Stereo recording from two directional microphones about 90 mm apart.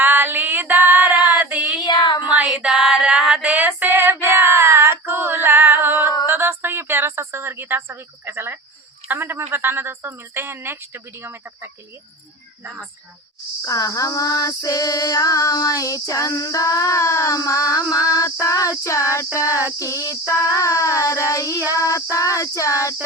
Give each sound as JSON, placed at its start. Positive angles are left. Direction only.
{"t": 0.0, "sound": "child singing", "side_deg": -25}
{"t": 1.8, "sound": "a sound", "side_deg": 55}
{"t": 2.3, "sound": "a sound", "side_deg": -15}
{"t": 3.8, "sound": "female singing", "side_deg": -25}
{"t": 6.2, "sound": "a sound", "side_deg": -25}
{"t": 9.0, "sound": "speech", "side_deg": -25}
{"t": 13.6, "sound": "female singing", "side_deg": 40}
{"t": 17.7, "sound": "female singing", "side_deg": -15}
{"t": 18.1, "sound": "female singing", "side_deg": 40}